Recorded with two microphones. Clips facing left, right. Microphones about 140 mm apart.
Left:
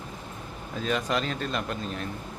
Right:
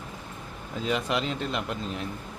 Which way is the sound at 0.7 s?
20° right (ahead or behind).